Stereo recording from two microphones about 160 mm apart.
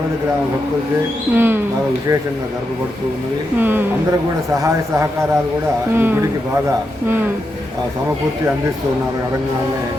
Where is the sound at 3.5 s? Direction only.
10° right (ahead or behind).